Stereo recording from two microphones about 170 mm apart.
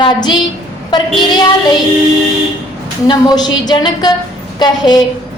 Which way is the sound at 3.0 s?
25° left (ahead or behind).